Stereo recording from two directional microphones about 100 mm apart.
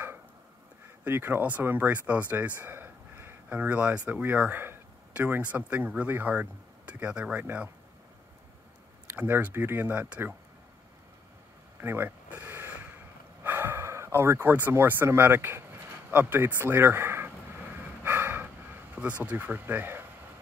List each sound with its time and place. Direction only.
1.0 s speech: 20° right (ahead or behind)
9.1 s speech: 20° right (ahead or behind)
11.8 s a sound: 20° right (ahead or behind)
13.4 s speech: 20° right (ahead or behind)
18.0 s a sound: 20° right (ahead or behind)
19.2 s speech: 15° right (ahead or behind)